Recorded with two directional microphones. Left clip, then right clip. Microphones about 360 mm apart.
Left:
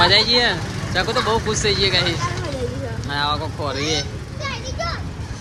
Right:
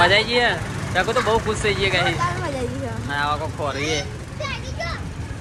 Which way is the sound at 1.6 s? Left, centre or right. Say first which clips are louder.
Left 2 dB; centre.